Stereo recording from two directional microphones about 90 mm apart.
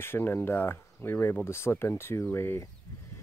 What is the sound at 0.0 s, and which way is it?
Speech, 25° left (ahead or behind).